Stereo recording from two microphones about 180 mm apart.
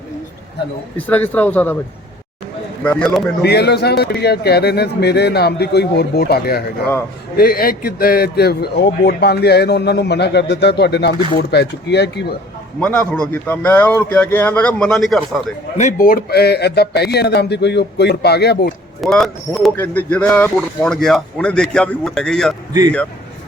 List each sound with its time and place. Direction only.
0.9 s a man's voice: 10° left (ahead or behind)
2.8 s speech: 5° left (ahead or behind)
3.4 s a man's voice: 65° left (ahead or behind)
12.8 s a man's voice: 5° left (ahead or behind)
15.8 s a man's voice: 45° left (ahead or behind); by 18.7 s 65° left (ahead or behind)
19.0 s speech: centre (ahead or behind)